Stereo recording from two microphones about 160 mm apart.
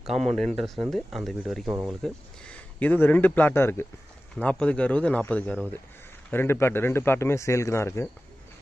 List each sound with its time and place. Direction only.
0.0 s speech: centre (ahead or behind)
1.7 s speech: 10° right (ahead or behind)
2.0 s speech: 5° left (ahead or behind)